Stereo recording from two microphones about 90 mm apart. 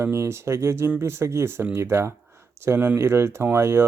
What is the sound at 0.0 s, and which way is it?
Speech, 30° right (ahead or behind).